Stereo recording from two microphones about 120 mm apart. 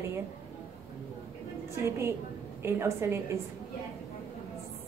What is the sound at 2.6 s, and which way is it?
Speech, 20° right (ahead or behind).